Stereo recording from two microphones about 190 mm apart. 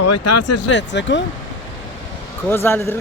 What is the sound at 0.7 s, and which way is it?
Speech, 70° left (ahead or behind).